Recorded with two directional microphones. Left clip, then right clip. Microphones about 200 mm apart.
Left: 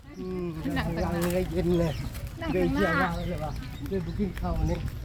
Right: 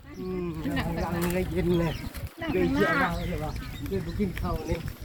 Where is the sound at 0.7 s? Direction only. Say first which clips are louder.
Left 1 dB; 25° left (ahead or behind).